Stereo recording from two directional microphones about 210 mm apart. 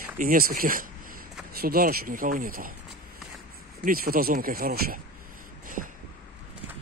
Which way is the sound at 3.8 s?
45° right (ahead or behind).